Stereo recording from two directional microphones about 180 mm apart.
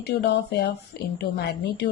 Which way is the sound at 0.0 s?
65° left (ahead or behind).